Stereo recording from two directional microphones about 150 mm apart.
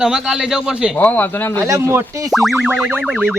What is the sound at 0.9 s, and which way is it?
Speech, 10° left (ahead or behind).